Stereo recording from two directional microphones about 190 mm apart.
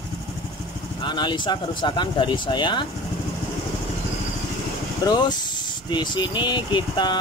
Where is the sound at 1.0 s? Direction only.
25° left (ahead or behind).